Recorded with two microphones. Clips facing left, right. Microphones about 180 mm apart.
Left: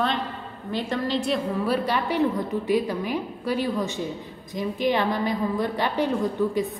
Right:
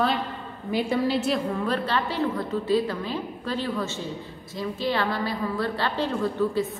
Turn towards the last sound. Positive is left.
turn(degrees=15)  # may be behind; listen again after turning